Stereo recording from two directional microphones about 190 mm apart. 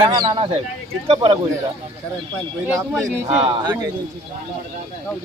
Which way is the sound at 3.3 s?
25° right (ahead or behind).